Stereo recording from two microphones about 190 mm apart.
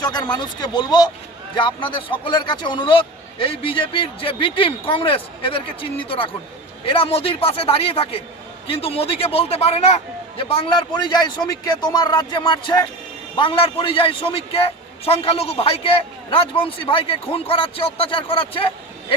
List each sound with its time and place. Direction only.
0.0 s a man's voice: 20° left (ahead or behind)